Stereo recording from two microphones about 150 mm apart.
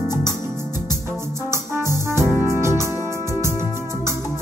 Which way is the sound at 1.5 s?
20° right (ahead or behind).